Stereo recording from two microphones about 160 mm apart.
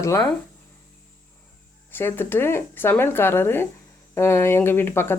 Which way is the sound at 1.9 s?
15° left (ahead or behind).